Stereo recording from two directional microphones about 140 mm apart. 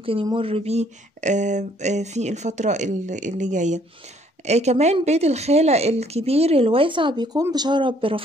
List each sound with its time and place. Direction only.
0.0 s speech: 40° right (ahead or behind)